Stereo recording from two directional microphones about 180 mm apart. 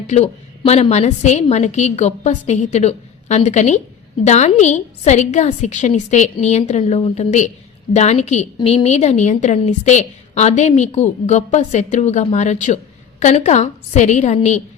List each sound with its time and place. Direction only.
0.1 s a woman's voice: 35° left (ahead or behind)